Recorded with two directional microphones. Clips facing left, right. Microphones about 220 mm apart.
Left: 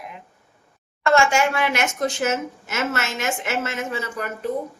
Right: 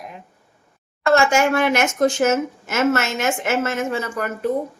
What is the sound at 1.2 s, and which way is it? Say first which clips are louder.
A woman's voice: right 4 dB; 45° right (ahead or behind).